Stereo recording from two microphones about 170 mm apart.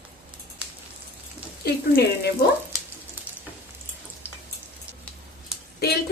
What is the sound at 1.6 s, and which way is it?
Speech, 70° left (ahead or behind).